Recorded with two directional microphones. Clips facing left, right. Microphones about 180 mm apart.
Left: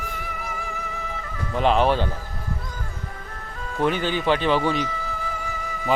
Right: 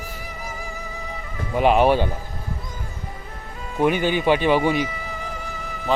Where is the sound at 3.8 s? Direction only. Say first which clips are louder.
Right 3 dB; 15° right (ahead or behind).